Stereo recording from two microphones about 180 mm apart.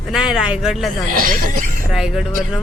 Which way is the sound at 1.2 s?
50° right (ahead or behind).